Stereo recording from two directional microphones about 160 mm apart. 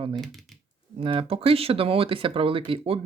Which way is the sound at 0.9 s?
35° right (ahead or behind).